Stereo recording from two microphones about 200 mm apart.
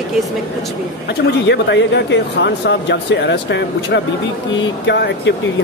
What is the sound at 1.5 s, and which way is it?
Speech, 60° left (ahead or behind).